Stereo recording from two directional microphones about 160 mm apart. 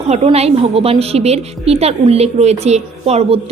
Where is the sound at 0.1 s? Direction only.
40° right (ahead or behind).